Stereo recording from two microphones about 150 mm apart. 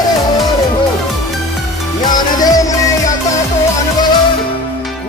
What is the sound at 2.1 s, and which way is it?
Music, 25° left (ahead or behind).